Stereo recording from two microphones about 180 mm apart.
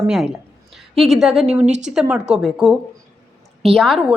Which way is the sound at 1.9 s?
5° right (ahead or behind).